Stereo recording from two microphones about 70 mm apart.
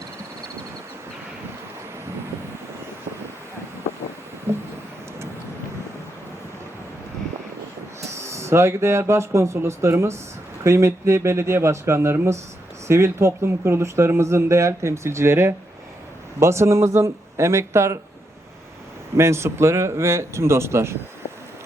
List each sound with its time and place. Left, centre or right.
4.5 s a sound: right
8.1 s speech: right
19.1 s speech: right